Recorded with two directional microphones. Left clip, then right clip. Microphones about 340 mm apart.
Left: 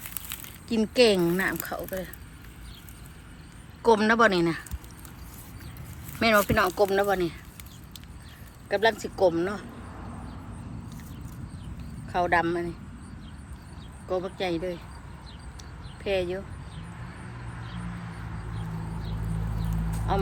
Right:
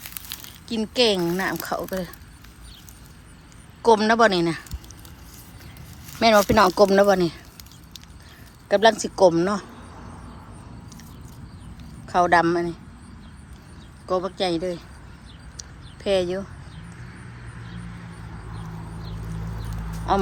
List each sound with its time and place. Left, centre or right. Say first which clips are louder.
0.0 s speech: right 3 dB; centre
3.8 s speech: right 4 dB; centre
6.1 s speech: right 6 dB; centre
8.7 s speech: right 7 dB; centre
12.0 s speech: right 6 dB; centre
14.1 s speech: right 5 dB; centre
16.0 s speech: right 6 dB; centre
20.1 s speech: right 7 dB; centre